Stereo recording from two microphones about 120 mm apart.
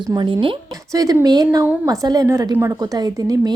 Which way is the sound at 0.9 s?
30° right (ahead or behind).